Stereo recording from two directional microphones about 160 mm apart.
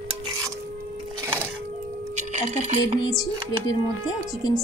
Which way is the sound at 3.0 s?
20° left (ahead or behind).